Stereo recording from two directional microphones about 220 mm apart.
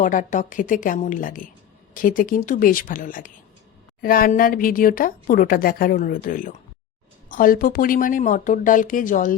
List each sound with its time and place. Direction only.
0.0 s speech: 35° left (ahead or behind)